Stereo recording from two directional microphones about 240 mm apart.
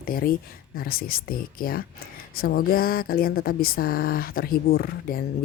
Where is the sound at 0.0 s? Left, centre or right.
Left.